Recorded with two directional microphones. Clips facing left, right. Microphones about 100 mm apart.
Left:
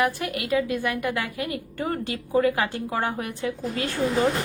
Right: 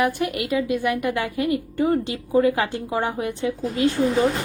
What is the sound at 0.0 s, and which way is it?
A woman's voice, 25° right (ahead or behind).